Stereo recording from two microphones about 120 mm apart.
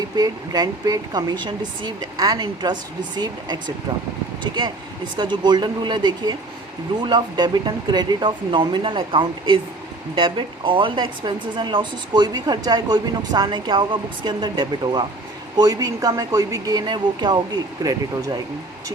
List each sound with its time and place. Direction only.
0.2 s speech: 30° right (ahead or behind)
5.1 s a woman's voice: 40° right (ahead or behind)